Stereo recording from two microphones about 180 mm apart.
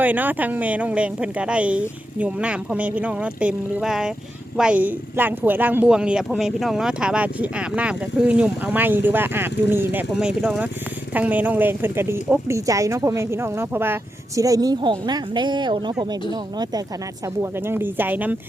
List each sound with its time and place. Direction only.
0.0 s speech: 10° right (ahead or behind)